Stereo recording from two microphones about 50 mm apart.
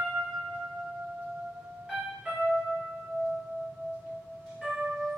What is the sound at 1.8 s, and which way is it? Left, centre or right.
Music, centre.